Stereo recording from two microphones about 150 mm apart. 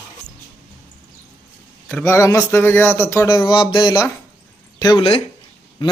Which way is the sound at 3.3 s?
30° left (ahead or behind).